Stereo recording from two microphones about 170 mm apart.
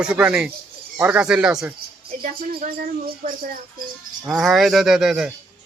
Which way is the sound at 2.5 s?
60° right (ahead or behind).